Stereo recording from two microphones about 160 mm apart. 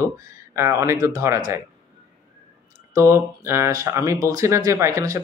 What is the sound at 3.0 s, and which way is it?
Speech, 15° right (ahead or behind).